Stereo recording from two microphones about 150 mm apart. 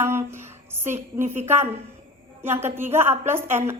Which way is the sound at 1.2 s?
15° right (ahead or behind).